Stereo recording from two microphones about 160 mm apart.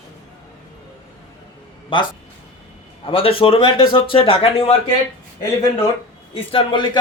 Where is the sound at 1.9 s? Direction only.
30° left (ahead or behind).